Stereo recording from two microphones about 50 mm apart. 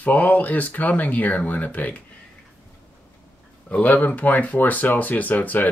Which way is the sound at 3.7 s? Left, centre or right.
Left.